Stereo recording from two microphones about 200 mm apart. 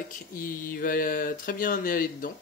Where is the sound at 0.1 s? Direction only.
45° left (ahead or behind).